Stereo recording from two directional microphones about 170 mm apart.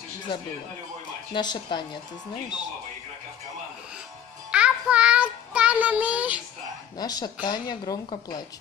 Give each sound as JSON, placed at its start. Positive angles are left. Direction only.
{"t": 1.3, "sound": "speech", "side_deg": 25}
{"t": 4.5, "sound": "child singing", "side_deg": -5}
{"t": 7.0, "sound": "speech", "side_deg": 25}